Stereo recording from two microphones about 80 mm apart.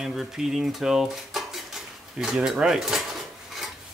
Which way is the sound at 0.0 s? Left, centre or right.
Centre.